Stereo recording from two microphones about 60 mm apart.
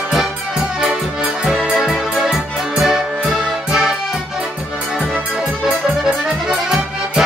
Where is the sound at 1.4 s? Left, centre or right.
Centre.